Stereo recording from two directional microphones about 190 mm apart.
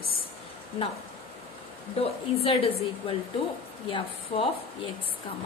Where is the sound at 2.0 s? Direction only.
30° left (ahead or behind).